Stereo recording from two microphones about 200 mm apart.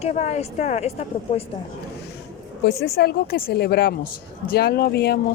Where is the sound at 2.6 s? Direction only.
55° left (ahead or behind).